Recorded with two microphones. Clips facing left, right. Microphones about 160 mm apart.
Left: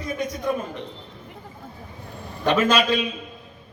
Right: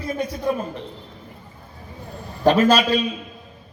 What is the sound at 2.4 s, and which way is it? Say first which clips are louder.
Speech: right 4 dB; 35° right (ahead or behind).